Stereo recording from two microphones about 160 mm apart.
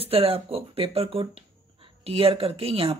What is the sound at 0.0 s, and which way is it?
Speech, 35° right (ahead or behind).